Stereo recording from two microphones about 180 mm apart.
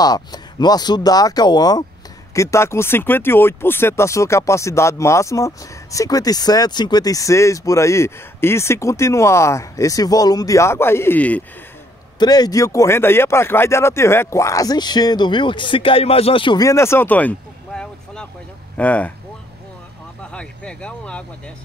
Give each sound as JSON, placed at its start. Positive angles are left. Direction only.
{"t": 0.0, "sound": "speech", "side_deg": 20}
{"t": 12.2, "sound": "speech", "side_deg": 20}
{"t": 20.3, "sound": "speech", "side_deg": 5}